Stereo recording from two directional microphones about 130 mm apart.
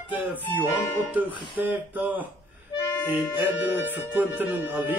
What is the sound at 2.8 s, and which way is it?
Harmonica, 15° left (ahead or behind).